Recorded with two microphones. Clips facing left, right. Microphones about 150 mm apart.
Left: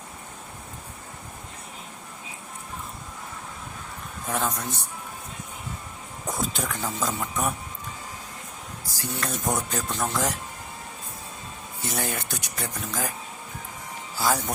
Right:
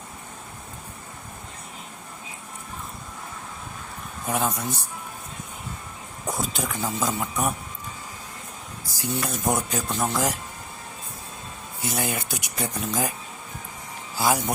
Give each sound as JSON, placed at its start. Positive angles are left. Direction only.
{"t": 4.3, "sound": "speech", "side_deg": -10}
{"t": 6.2, "sound": "speech", "side_deg": 0}
{"t": 9.0, "sound": "speech", "side_deg": -10}
{"t": 11.9, "sound": "speech", "side_deg": -5}
{"t": 14.2, "sound": "speech", "side_deg": -10}